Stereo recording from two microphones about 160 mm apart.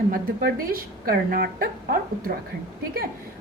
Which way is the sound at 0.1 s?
65° right (ahead or behind).